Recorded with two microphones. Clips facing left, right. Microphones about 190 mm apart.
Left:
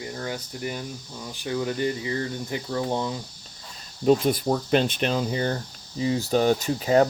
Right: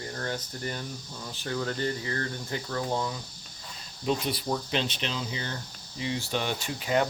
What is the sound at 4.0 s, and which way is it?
Speech, 50° left (ahead or behind).